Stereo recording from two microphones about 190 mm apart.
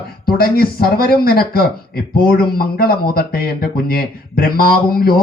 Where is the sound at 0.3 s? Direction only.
55° left (ahead or behind).